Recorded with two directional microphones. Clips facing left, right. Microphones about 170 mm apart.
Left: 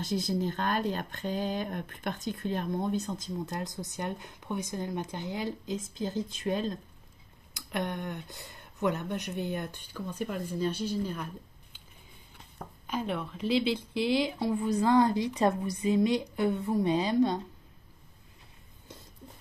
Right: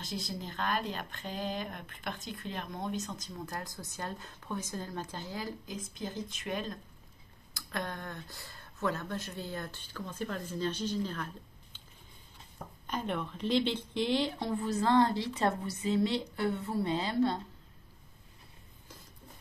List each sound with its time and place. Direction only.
0.0 s speech: 40° left (ahead or behind); by 11.8 s 10° left (ahead or behind)
12.8 s a woman's voice: 5° left (ahead or behind)